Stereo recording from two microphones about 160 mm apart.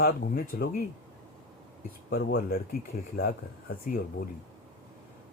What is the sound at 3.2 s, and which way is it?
Speech, 65° left (ahead or behind).